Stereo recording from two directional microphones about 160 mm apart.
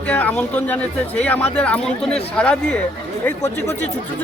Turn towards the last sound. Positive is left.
turn(degrees=15)  # may be behind; listen again after turning